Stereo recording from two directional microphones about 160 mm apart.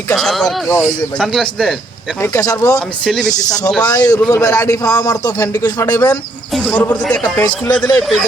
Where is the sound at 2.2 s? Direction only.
20° left (ahead or behind).